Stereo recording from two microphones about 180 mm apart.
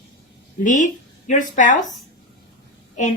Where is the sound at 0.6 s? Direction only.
45° left (ahead or behind).